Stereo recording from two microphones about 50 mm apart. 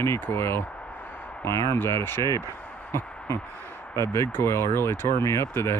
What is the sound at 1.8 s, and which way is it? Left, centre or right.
Speech, left.